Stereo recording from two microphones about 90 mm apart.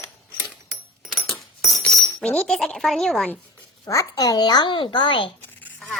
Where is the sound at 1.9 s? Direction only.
5° left (ahead or behind).